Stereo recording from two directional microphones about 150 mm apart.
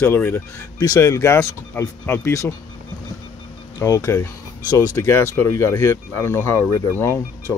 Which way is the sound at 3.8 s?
20° left (ahead or behind).